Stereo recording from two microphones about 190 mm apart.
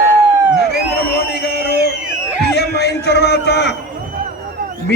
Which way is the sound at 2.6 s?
60° left (ahead or behind).